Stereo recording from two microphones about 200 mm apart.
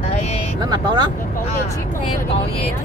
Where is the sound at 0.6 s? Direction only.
20° right (ahead or behind).